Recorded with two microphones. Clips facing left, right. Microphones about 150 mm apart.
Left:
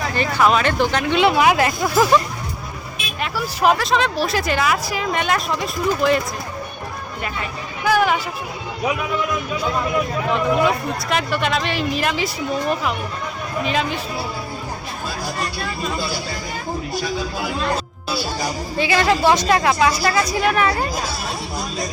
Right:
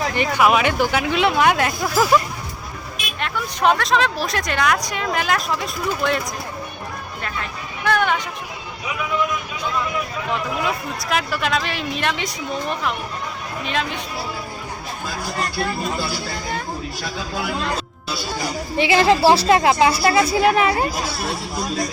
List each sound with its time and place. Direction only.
0.1 s speech: 15° right (ahead or behind); by 2.1 s centre (ahead or behind)
3.2 s speech: 5° left (ahead or behind)
7.9 s speech: 5° left (ahead or behind)
10.3 s speech: centre (ahead or behind)
18.8 s speech: 25° right (ahead or behind)